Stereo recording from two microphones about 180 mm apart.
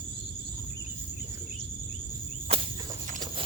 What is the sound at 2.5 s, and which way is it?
Walk, 35° right (ahead or behind).